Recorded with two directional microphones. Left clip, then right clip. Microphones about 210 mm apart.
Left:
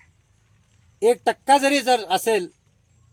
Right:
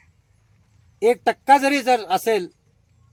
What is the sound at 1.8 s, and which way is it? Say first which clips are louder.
Speech: right 1 dB; centre (ahead or behind).